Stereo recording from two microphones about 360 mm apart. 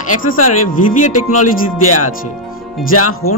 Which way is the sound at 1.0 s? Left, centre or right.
Left.